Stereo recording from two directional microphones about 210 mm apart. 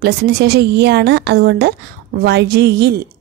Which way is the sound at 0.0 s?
50° right (ahead or behind).